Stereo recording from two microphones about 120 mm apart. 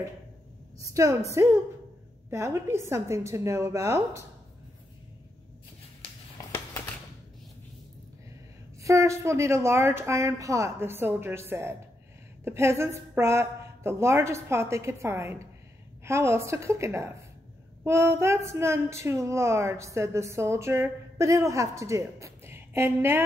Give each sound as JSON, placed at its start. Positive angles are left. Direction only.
{"t": 0.7, "sound": "speech", "side_deg": -25}
{"t": 8.8, "sound": "speech", "side_deg": -25}